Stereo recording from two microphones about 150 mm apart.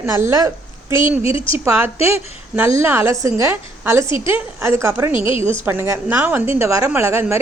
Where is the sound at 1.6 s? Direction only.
15° right (ahead or behind).